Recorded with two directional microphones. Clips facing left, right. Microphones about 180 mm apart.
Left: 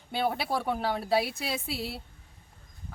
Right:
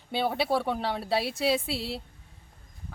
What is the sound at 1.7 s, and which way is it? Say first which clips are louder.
Speech: right 2 dB; 30° right (ahead or behind).